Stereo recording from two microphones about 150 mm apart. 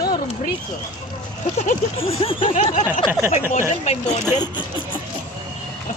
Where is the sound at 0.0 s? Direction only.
25° left (ahead or behind).